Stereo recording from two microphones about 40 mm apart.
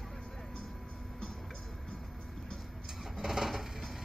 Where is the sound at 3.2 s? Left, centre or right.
Centre.